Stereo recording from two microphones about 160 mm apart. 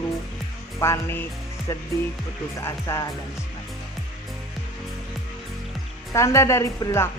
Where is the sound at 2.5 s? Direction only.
20° left (ahead or behind).